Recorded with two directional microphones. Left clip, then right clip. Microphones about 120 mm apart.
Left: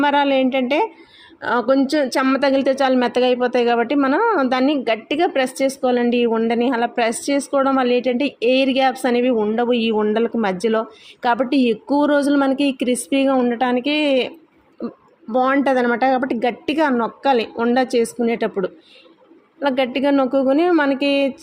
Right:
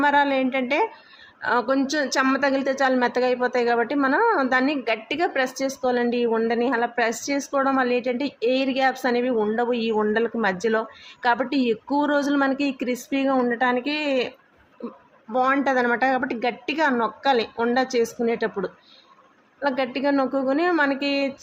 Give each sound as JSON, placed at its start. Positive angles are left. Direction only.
{"t": 0.0, "sound": "a woman's voice", "side_deg": 45}
{"t": 14.8, "sound": "a woman's voice", "side_deg": 35}